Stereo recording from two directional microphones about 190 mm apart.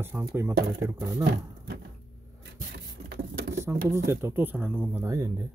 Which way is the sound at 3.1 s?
60° right (ahead or behind).